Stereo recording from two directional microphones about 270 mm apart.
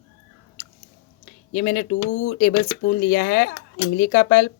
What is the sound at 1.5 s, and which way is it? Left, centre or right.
Speech, left.